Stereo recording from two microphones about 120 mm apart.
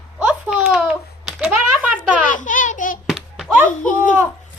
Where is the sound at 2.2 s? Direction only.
90° left.